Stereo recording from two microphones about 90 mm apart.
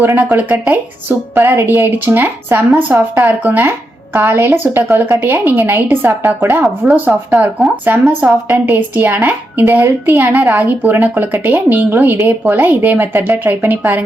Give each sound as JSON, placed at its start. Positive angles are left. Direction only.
{"t": 0.2, "sound": "a woman's voice", "side_deg": -20}
{"t": 6.8, "sound": "a woman's voice", "side_deg": -20}